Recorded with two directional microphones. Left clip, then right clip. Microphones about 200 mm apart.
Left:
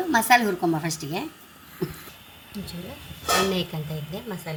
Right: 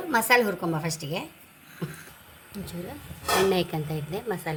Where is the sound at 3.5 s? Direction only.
30° right (ahead or behind).